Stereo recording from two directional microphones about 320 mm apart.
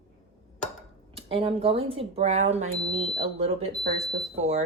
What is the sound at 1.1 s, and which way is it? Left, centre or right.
A woman's voice, centre.